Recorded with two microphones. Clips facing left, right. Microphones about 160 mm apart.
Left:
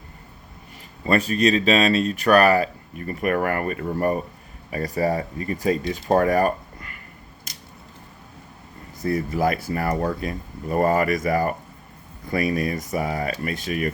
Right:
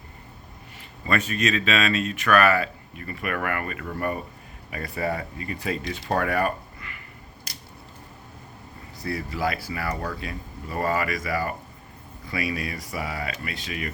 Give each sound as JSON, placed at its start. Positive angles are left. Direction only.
{"t": 1.0, "sound": "speech", "side_deg": 35}
{"t": 9.0, "sound": "speech", "side_deg": 45}